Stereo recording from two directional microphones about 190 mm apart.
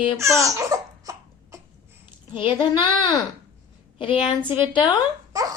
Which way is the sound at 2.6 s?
25° left (ahead or behind).